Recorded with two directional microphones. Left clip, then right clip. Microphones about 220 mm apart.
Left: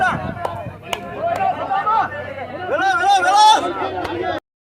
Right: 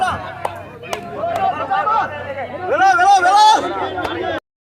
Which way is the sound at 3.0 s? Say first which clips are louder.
Even; 40° right (ahead or behind).